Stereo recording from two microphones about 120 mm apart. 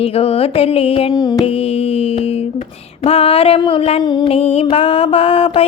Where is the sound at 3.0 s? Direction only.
55° left (ahead or behind).